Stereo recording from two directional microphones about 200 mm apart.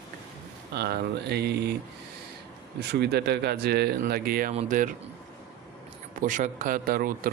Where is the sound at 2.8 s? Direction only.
55° right (ahead or behind).